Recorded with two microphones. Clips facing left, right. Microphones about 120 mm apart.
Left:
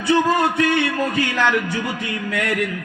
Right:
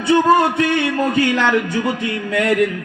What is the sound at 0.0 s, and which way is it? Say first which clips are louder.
Speech: right 4 dB; 25° right (ahead or behind).